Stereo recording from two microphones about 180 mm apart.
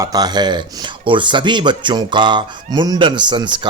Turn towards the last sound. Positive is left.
turn(degrees=-25)  # may be behind; listen again after turning